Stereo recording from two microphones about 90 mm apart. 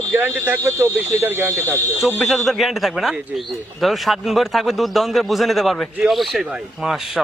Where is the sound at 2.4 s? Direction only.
Centre (ahead or behind).